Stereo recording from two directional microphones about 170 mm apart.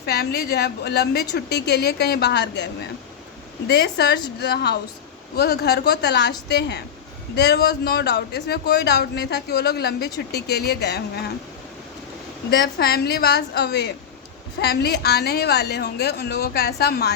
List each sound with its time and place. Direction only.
0.0 s a woman's voice: 70° left (ahead or behind); by 2.9 s 90° left
3.7 s a woman's voice: 80° left
12.5 s a woman's voice: 70° left (ahead or behind)